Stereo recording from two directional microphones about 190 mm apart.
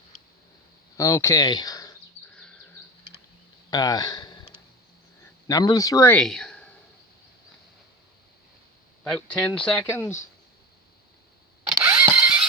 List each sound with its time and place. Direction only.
0.9 s speech: 15° left (ahead or behind)
2.3 s a sound: 5° left (ahead or behind)
3.7 s a sound: 20° left (ahead or behind)
5.5 s speech: 20° left (ahead or behind); by 6.7 s 5° left (ahead or behind)
9.0 s speech: 5° left (ahead or behind)
11.8 s engine starting: 10° right (ahead or behind)